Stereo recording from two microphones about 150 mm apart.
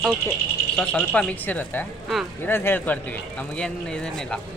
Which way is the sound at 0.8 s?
5° left (ahead or behind).